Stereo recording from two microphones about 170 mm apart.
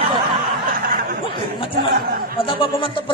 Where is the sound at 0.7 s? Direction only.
60° right (ahead or behind).